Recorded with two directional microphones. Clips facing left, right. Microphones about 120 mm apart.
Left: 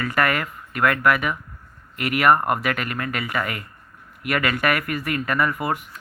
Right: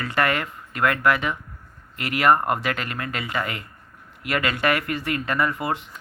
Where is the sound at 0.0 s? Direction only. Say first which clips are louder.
Left 1 dB; 25° right (ahead or behind).